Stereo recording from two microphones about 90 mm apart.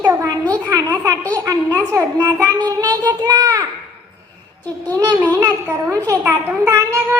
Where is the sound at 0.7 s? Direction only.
40° right (ahead or behind).